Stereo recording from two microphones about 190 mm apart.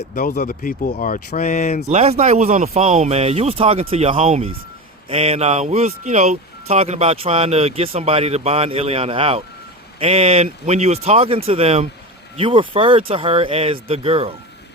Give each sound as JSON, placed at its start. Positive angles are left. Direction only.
{"t": 0.0, "sound": "speech", "side_deg": 50}
{"t": 1.9, "sound": "speech", "side_deg": -35}